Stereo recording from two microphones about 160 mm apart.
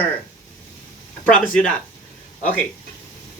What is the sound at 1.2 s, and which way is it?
Speech, 10° left (ahead or behind).